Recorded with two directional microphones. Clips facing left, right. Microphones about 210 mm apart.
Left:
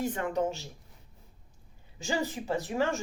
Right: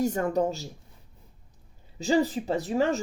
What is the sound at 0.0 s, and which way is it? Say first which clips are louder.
Speech: right 5 dB; 40° right (ahead or behind).